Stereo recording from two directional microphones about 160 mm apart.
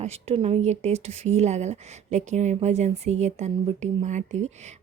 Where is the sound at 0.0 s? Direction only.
40° right (ahead or behind).